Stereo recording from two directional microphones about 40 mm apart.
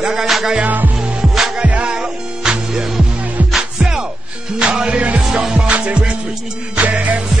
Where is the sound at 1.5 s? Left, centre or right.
Right.